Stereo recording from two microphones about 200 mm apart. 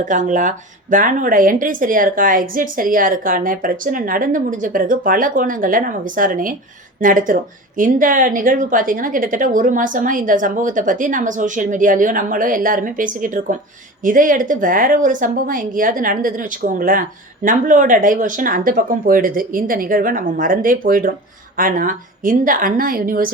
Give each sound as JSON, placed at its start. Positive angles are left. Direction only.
{"t": 0.0, "sound": "a woman's voice", "side_deg": -40}